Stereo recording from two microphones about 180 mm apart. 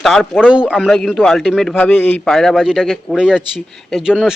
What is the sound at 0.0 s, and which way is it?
Speech, centre (ahead or behind).